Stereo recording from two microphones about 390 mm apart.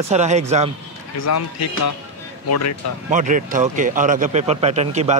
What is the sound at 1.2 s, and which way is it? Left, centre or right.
Speech, left.